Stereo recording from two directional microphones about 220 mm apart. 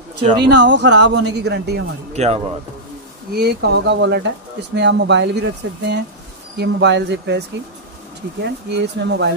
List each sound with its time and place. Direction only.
0.4 s speech: 50° right (ahead or behind)
2.1 s speech: 30° right (ahead or behind)
3.3 s speech: 50° right (ahead or behind)